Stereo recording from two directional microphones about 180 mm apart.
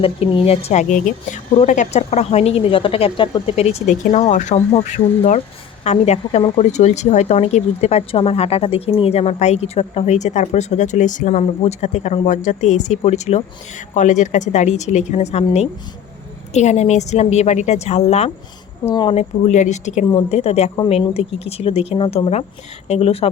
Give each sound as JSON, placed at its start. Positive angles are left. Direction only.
{"t": 0.0, "sound": "a woman's voice", "side_deg": 30}
{"t": 16.6, "sound": "a woman's voice", "side_deg": 40}
{"t": 18.9, "sound": "speech", "side_deg": 25}
{"t": 19.1, "sound": "a woman's voice", "side_deg": 40}